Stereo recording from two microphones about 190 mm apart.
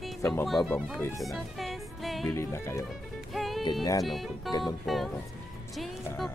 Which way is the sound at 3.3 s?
Centre (ahead or behind).